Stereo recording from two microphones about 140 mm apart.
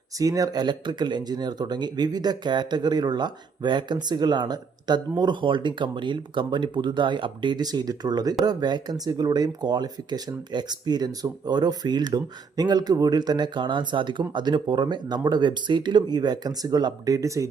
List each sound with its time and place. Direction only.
0.2 s speech: 25° right (ahead or behind)